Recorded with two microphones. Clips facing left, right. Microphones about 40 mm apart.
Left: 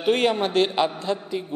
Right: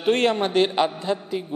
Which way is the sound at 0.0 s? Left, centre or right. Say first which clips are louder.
Right 1 dB; centre.